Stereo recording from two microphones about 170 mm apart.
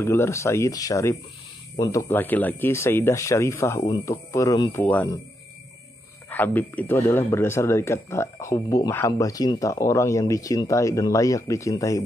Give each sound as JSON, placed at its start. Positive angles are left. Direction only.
{"t": 0.0, "sound": "speech", "side_deg": 15}
{"t": 4.8, "sound": "speech", "side_deg": 10}
{"t": 6.3, "sound": "speech", "side_deg": 10}